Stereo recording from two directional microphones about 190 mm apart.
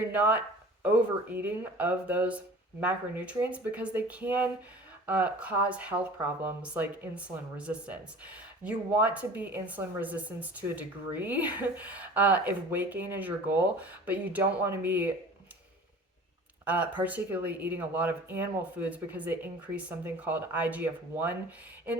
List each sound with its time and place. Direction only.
0.0 s speech: 10° right (ahead or behind)
16.6 s speech: 10° right (ahead or behind)